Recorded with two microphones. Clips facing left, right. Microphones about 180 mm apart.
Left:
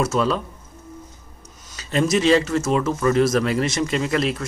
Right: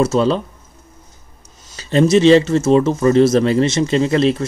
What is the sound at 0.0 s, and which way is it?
Speech, 25° right (ahead or behind).